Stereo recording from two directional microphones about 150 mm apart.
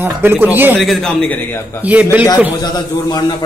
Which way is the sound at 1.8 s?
10° right (ahead or behind).